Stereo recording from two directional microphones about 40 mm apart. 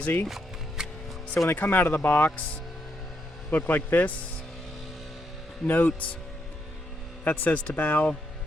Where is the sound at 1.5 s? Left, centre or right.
Left.